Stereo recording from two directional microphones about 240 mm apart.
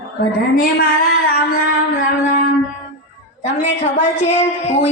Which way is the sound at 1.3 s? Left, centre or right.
Left.